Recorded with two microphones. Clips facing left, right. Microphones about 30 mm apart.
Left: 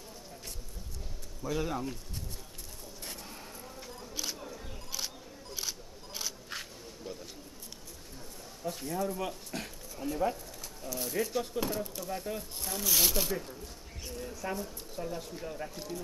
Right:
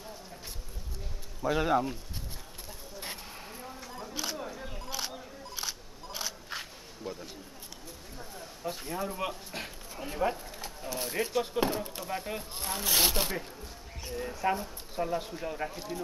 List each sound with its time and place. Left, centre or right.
1.4 s speech: right
3.0 s a sound: right
4.6 s single-lens reflex camera: centre
8.6 s speech: right
15.7 s speech: centre